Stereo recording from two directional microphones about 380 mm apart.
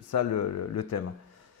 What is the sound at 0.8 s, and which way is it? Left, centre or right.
Speech, left.